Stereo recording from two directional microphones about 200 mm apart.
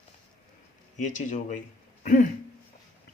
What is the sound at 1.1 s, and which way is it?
Speech, 40° left (ahead or behind).